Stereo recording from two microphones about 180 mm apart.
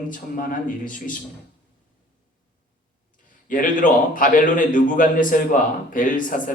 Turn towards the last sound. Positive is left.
turn(degrees=50)  # may be behind; listen again after turning